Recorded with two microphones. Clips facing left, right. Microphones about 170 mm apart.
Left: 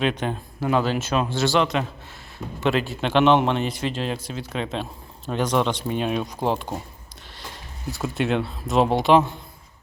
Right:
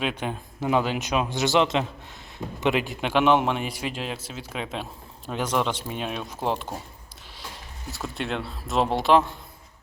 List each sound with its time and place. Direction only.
0.0 s a man's voice: 5° right (ahead or behind)
7.9 s a man's voice: centre (ahead or behind)